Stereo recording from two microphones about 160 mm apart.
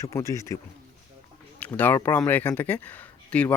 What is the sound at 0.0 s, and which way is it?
Speech, 20° left (ahead or behind).